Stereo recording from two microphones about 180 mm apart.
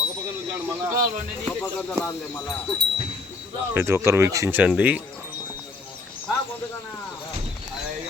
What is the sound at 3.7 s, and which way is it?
Speech, 15° right (ahead or behind).